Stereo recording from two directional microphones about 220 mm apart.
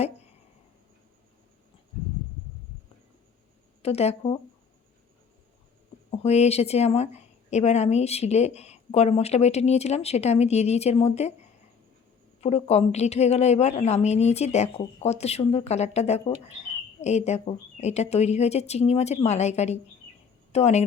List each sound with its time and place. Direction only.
3.8 s a woman's voice: 30° left (ahead or behind)
6.1 s a woman's voice: 30° left (ahead or behind)
12.4 s a woman's voice: 30° left (ahead or behind)